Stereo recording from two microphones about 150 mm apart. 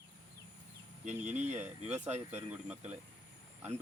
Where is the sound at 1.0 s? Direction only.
55° right (ahead or behind).